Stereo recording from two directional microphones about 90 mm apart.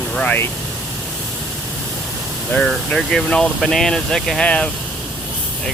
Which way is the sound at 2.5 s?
5° left (ahead or behind).